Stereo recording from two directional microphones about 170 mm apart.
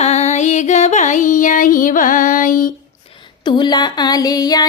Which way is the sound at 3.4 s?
25° left (ahead or behind).